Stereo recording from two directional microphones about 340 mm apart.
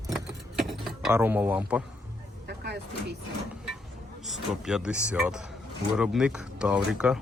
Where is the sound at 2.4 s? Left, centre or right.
Right.